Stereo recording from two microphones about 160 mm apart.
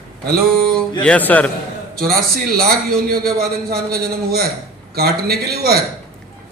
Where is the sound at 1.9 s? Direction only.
70° right (ahead or behind).